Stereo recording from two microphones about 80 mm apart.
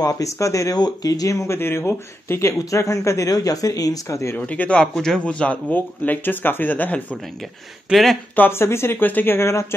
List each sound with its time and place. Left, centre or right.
0.0 s speech: left
0.7 s speech: left
1.6 s speech: left
4.4 s a man's voice: centre
7.9 s speech: centre
8.4 s speech: left